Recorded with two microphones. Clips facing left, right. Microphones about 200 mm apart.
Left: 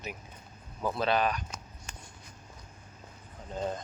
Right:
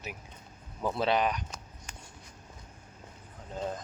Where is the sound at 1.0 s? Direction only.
20° right (ahead or behind).